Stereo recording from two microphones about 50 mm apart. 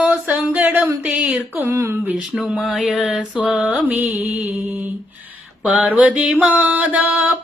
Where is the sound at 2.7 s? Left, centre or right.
Centre.